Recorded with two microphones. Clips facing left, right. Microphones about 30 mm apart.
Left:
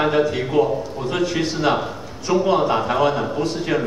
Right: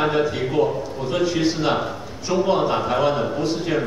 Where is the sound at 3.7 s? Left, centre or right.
Left.